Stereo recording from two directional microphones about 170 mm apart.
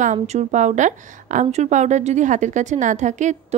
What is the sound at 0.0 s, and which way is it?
A woman's voice, 45° right (ahead or behind).